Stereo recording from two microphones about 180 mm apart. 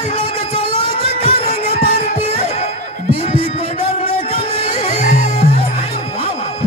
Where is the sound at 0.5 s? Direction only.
35° right (ahead or behind).